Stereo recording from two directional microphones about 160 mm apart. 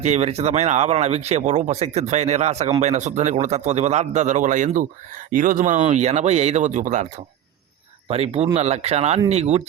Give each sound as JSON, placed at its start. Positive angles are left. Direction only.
{"t": 0.0, "sound": "speech", "side_deg": -45}
{"t": 8.0, "sound": "speech", "side_deg": -40}